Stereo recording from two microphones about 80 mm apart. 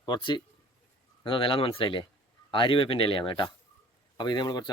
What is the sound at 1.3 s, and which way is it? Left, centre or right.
Speech, left.